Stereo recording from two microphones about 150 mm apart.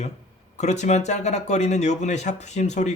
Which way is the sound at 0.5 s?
50° left (ahead or behind).